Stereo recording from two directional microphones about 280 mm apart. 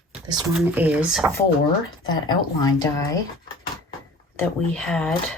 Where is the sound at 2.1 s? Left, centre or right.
Centre.